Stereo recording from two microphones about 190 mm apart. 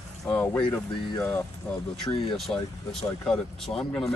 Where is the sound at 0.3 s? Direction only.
5° left (ahead or behind).